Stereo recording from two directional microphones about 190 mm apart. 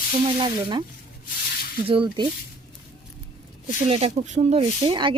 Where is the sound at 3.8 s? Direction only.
35° right (ahead or behind).